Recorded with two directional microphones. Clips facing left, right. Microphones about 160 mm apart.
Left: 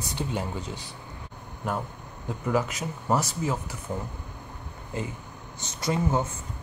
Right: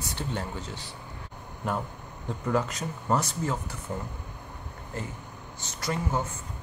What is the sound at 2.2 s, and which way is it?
Speech, 5° left (ahead or behind).